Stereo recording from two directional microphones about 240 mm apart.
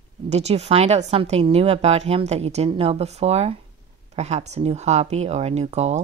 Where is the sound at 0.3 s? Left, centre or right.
Right.